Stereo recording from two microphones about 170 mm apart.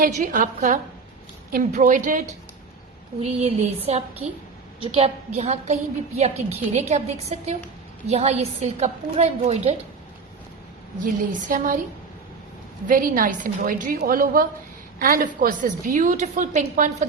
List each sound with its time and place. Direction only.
0.0 s a woman's voice: 50° right (ahead or behind)
3.4 s a woman's voice: 40° right (ahead or behind)
11.0 s a woman's voice: 50° right (ahead or behind)
12.9 s a woman's voice: 50° right (ahead or behind)